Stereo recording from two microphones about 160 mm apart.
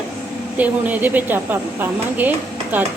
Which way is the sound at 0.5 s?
10° right (ahead or behind).